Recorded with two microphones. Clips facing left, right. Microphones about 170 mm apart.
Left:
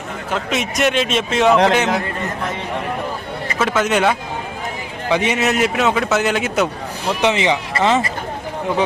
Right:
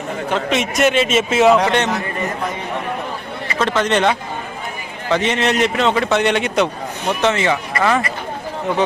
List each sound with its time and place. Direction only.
0.3 s a man's voice: centre (ahead or behind)
3.6 s a man's voice: 5° left (ahead or behind)
7.2 s speech: 15° left (ahead or behind)